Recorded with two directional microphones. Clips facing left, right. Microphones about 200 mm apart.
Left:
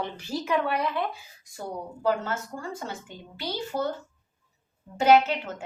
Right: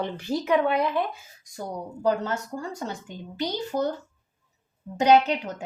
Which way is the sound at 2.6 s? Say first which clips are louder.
Right 3 dB; 40° right (ahead or behind).